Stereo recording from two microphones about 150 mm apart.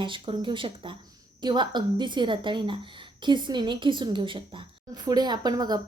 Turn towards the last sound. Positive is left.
turn(degrees=-25)  # may be behind; listen again after turning